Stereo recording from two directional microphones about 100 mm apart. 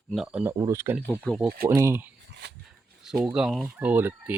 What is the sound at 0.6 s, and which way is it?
Speech, 30° right (ahead or behind).